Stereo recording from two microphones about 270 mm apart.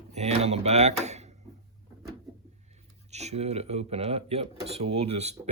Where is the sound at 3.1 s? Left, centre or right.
Right.